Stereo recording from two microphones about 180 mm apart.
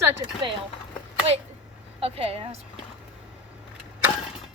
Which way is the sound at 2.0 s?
35° right (ahead or behind).